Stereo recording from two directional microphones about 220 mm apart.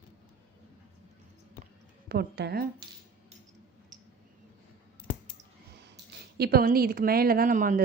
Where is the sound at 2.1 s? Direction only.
45° right (ahead or behind).